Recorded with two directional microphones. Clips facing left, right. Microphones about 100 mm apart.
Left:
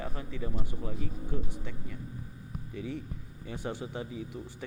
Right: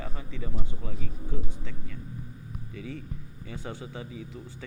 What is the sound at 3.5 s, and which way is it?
A man's voice, 15° left (ahead or behind).